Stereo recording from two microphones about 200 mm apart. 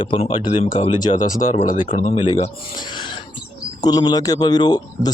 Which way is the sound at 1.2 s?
40° left (ahead or behind).